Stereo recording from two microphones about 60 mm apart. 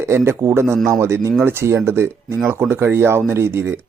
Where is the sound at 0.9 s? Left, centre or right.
Right.